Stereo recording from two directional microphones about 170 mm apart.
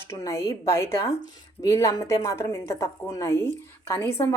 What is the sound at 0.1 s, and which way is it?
Speech, 15° left (ahead or behind).